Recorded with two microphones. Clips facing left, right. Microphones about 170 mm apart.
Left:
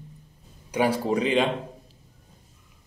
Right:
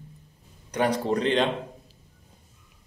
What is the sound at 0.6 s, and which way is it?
Speech, 5° left (ahead or behind).